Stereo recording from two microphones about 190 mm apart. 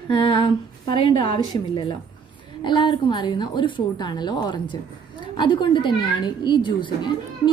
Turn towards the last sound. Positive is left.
turn(degrees=25)  # may be behind; listen again after turning